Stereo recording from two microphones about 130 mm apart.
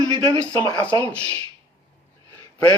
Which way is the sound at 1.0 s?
10° left (ahead or behind).